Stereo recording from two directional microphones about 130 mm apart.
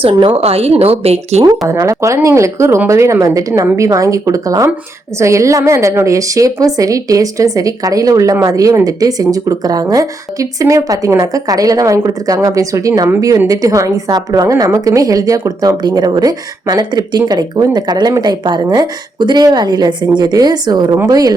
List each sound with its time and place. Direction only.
0.0 s speech: 35° right (ahead or behind)
0.4 s speech: 50° right (ahead or behind)
1.4 s a woman's voice: 20° right (ahead or behind)